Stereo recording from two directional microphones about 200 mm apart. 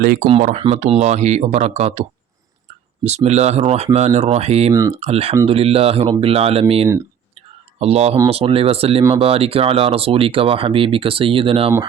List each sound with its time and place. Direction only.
0.0 s speech: 45° right (ahead or behind)
0.6 s speech: 30° right (ahead or behind)
4.7 s speech: 15° right (ahead or behind)
4.9 s speech: 30° right (ahead or behind)